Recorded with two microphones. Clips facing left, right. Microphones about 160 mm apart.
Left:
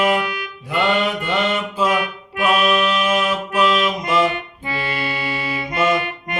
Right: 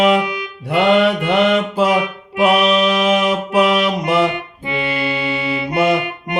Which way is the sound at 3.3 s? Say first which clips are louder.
Right 4 dB; 65° right (ahead or behind).